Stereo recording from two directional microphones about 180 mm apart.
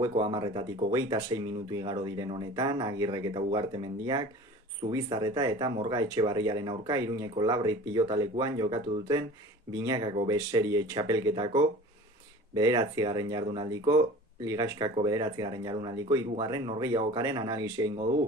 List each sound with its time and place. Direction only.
0.0 s speech: 20° right (ahead or behind)